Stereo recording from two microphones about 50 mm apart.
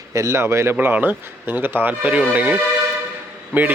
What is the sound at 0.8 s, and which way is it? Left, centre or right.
Speech, right.